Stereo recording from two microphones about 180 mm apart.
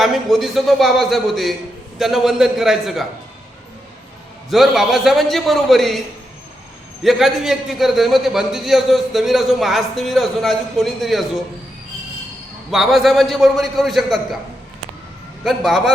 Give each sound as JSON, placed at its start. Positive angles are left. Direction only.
{"t": 0.0, "sound": "a man's voice", "side_deg": 0}
{"t": 4.4, "sound": "a man's voice", "side_deg": 0}
{"t": 7.0, "sound": "a man's voice", "side_deg": 0}
{"t": 12.7, "sound": "a man's voice", "side_deg": 0}
{"t": 15.4, "sound": "a man's voice", "side_deg": 0}